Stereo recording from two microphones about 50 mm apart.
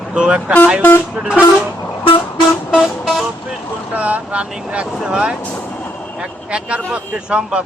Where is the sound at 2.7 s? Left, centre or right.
Centre.